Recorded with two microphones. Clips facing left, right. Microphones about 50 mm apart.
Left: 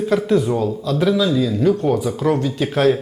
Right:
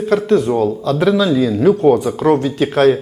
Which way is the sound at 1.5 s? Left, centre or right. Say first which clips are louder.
Right 5 dB; centre.